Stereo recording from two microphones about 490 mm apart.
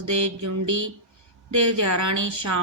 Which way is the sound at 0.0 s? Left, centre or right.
Right.